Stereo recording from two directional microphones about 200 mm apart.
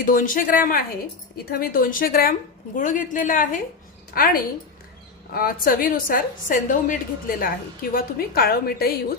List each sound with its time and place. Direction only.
0.0 s a woman's voice: 45° left (ahead or behind)